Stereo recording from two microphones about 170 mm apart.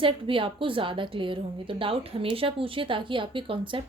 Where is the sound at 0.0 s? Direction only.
30° right (ahead or behind).